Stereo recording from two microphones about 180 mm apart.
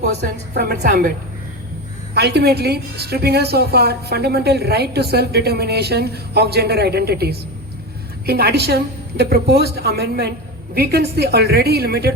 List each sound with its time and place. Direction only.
0.5 s a woman's voice: 60° right (ahead or behind)
2.1 s a woman's voice: 65° right (ahead or behind)